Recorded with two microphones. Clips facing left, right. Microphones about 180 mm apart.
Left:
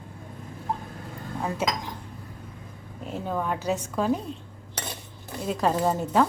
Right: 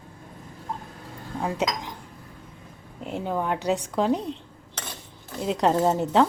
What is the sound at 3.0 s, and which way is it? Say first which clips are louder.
Speech: right 2 dB; 15° right (ahead or behind).